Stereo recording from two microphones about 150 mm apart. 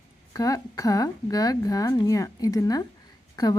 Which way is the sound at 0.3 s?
25° left (ahead or behind).